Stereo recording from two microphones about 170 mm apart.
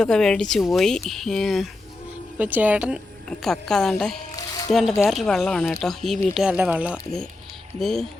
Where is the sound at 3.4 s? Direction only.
5° left (ahead or behind).